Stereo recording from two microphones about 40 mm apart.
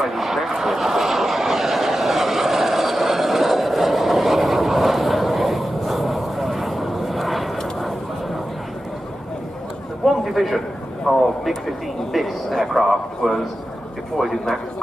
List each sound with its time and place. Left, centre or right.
0.0 s vehicle: centre
10.0 s a sound: centre
11.1 s speech: centre